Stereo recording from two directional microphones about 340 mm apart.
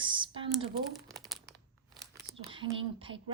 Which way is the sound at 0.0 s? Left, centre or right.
Centre.